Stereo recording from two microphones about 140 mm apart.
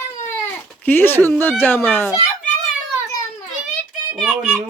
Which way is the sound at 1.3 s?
15° left (ahead or behind).